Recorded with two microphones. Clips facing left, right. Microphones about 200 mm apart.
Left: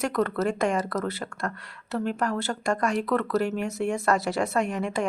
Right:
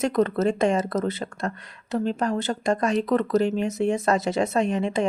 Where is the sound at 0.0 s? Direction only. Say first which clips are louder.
Right 4 dB; 20° right (ahead or behind).